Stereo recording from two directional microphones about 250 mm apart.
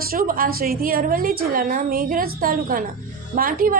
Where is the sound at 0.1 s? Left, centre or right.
Right.